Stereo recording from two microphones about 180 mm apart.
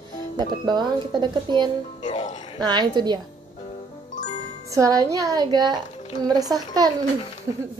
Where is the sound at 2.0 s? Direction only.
40° left (ahead or behind).